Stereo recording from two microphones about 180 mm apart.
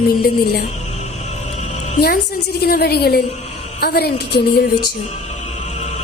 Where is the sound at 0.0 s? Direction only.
60° left (ahead or behind).